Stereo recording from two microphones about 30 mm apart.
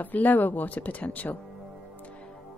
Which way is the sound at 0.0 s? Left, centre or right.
Left.